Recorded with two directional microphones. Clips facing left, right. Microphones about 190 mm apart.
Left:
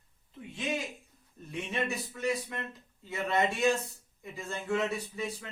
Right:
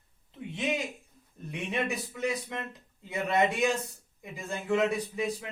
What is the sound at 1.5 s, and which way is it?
Speech, 15° right (ahead or behind).